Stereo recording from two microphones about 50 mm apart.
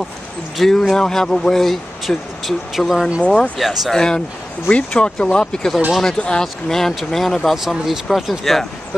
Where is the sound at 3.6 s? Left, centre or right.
Centre.